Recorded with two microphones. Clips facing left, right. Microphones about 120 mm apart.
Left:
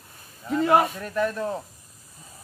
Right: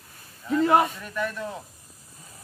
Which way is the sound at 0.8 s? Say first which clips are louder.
Left 2 dB; 40° left (ahead or behind).